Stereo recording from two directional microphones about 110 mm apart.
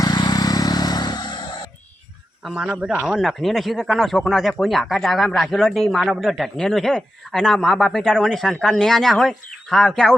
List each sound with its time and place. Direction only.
0.0 s vehicle: 40° left (ahead or behind)
2.5 s speech: 10° right (ahead or behind); by 10.2 s 5° left (ahead or behind)